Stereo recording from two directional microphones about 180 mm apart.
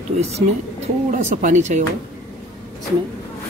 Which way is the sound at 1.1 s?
45° right (ahead or behind).